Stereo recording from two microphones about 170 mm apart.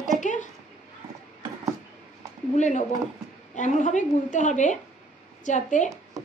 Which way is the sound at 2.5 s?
45° left (ahead or behind).